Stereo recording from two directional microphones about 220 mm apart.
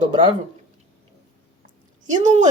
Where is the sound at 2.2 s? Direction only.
35° right (ahead or behind).